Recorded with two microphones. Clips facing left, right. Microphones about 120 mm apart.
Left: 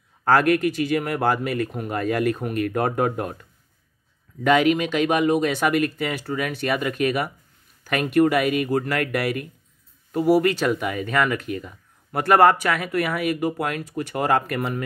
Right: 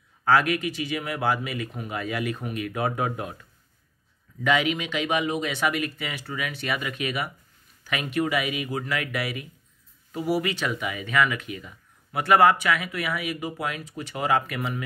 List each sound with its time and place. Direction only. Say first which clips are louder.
0.2 s speech: left 4 dB; 50° left (ahead or behind)
4.4 s speech: left 6 dB; 45° left (ahead or behind)